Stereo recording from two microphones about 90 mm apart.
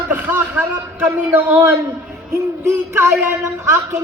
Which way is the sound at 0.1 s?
20° right (ahead or behind).